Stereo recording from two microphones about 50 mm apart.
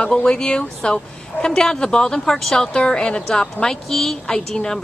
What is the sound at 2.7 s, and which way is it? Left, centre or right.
Speech, centre.